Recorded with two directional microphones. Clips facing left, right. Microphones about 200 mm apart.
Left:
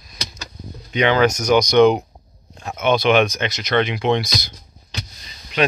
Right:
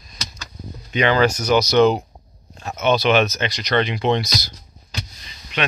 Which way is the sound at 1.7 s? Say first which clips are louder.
Left 3 dB; 15° left (ahead or behind).